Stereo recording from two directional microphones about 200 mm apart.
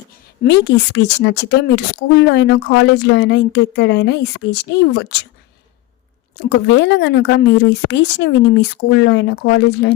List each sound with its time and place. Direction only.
0.4 s a woman's voice: 60° left (ahead or behind)
6.4 s a woman's voice: 55° left (ahead or behind)